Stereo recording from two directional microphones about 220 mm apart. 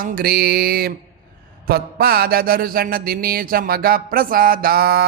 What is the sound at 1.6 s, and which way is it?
Mantra, 45° right (ahead or behind).